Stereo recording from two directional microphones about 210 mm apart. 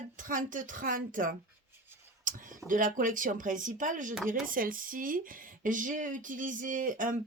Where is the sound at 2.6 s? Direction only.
40° right (ahead or behind).